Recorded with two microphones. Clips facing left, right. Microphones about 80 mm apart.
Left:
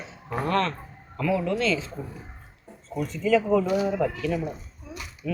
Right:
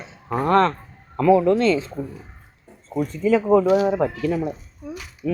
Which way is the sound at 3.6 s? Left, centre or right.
Right.